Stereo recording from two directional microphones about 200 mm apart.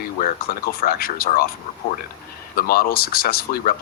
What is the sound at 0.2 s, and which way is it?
Speech, 45° left (ahead or behind).